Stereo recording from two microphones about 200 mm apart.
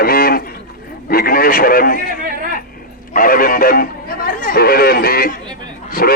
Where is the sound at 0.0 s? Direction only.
50° left (ahead or behind).